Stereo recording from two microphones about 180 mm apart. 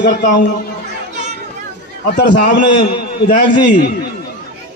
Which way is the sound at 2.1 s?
80° left.